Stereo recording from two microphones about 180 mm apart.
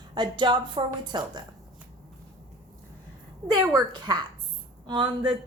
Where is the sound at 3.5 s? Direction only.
25° right (ahead or behind).